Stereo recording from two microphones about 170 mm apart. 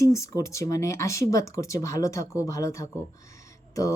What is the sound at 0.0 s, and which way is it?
Speech, 20° left (ahead or behind).